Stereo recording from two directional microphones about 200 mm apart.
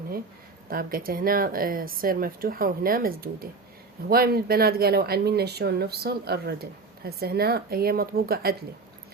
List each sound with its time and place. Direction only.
0.7 s speech: 45° right (ahead or behind)